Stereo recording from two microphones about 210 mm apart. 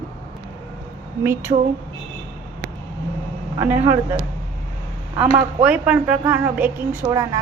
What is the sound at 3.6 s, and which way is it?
Speech, 10° right (ahead or behind).